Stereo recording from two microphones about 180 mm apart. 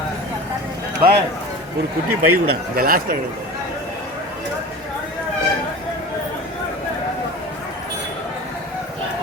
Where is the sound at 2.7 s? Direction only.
55° right (ahead or behind).